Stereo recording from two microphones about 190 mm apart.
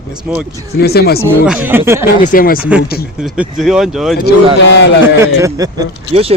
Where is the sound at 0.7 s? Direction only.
55° left (ahead or behind).